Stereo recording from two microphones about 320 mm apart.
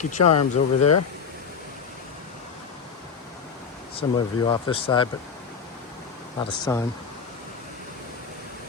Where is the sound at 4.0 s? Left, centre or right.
Centre.